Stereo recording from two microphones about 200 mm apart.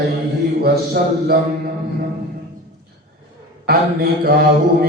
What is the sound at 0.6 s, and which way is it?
Mantra, 50° right (ahead or behind).